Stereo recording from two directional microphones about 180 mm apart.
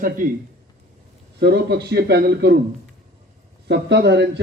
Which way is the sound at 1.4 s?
70° right (ahead or behind).